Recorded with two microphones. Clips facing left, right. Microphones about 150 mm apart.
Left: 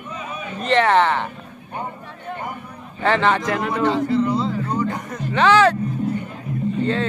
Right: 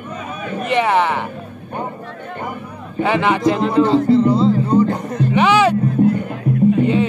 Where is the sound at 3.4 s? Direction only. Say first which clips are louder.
Right 6 dB; 25° right (ahead or behind).